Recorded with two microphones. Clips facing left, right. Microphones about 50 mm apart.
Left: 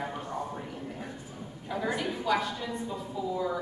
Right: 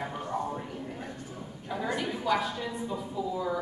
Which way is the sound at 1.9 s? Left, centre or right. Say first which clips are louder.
Right 1 dB; centre.